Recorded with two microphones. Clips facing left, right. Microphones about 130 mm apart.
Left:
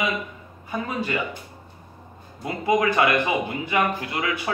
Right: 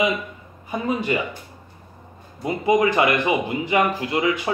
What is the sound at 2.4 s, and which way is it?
A man's voice, 25° right (ahead or behind).